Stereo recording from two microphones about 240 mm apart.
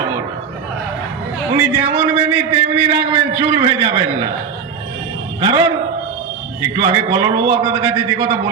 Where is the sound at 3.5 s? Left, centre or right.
Centre.